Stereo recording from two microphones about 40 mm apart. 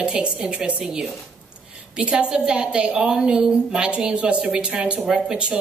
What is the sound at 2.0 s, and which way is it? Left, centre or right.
A woman's voice, right.